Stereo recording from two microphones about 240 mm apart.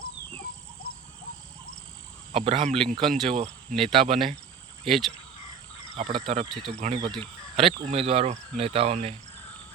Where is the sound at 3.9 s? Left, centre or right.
Right.